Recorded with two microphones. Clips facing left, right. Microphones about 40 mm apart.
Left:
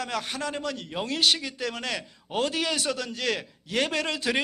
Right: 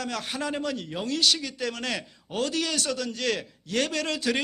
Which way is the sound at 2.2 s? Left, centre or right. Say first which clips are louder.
Left 1 dB; centre.